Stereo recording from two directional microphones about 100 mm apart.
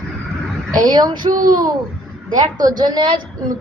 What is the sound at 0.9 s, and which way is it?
A child's voice, 45° right (ahead or behind).